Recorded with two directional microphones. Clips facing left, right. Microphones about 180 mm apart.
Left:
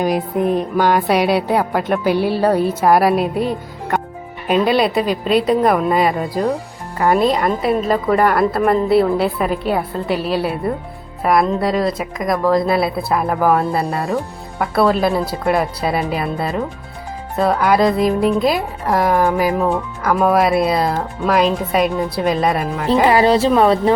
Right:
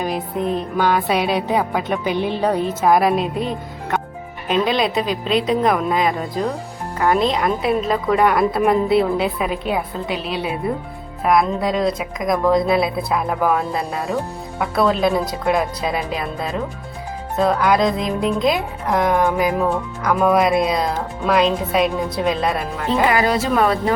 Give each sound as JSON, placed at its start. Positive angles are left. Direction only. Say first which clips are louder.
{"t": 0.4, "sound": "a woman's voice", "louder": "left 3 dB", "side_deg": 10}
{"t": 4.5, "sound": "a woman's voice", "louder": "left 3 dB", "side_deg": 5}
{"t": 22.9, "sound": "speech", "louder": "left 5 dB", "side_deg": 30}